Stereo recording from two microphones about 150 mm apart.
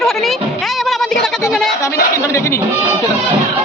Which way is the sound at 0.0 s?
Centre (ahead or behind).